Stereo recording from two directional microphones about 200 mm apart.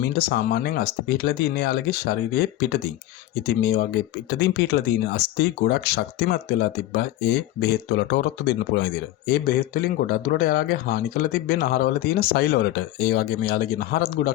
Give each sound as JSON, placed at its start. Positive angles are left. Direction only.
{"t": 0.1, "sound": "speech", "side_deg": 50}